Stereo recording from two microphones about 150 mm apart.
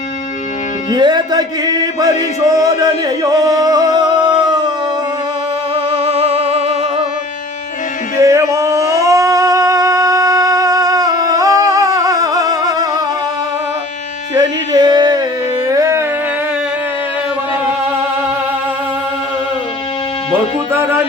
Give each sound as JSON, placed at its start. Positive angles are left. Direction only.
{"t": 0.9, "sound": "music", "side_deg": -30}
{"t": 6.1, "sound": "music", "side_deg": -40}
{"t": 8.2, "sound": "singing", "side_deg": -20}
{"t": 14.3, "sound": "a sound", "side_deg": -25}
{"t": 15.7, "sound": "music", "side_deg": -20}